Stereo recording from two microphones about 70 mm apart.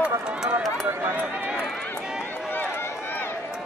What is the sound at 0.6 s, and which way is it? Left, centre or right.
Run, centre.